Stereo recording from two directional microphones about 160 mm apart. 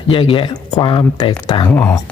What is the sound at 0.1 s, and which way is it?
Speech, 35° left (ahead or behind).